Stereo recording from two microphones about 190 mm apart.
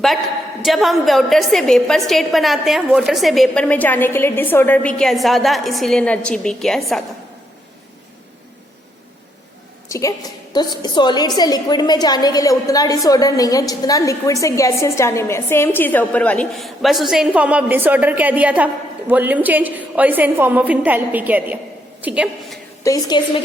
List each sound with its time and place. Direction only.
0.6 s a woman's voice: centre (ahead or behind)
9.9 s a woman's voice: 15° left (ahead or behind); by 22.5 s 5° right (ahead or behind)
22.8 s a woman's voice: 20° left (ahead or behind)